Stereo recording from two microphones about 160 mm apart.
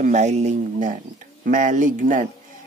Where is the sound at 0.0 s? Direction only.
50° right (ahead or behind).